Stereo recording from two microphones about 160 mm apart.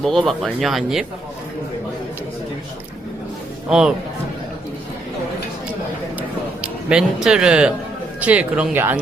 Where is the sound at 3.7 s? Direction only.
5° right (ahead or behind).